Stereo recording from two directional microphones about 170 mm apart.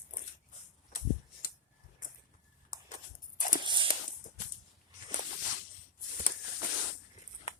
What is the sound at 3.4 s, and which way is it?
Walk, 50° left (ahead or behind).